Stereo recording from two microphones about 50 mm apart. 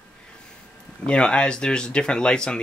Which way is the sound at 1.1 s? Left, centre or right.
Left.